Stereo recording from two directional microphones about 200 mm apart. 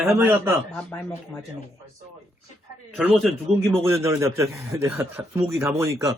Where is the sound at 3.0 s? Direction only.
Centre (ahead or behind).